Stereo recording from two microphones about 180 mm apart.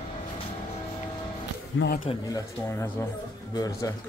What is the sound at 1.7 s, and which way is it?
Speech, 90° left.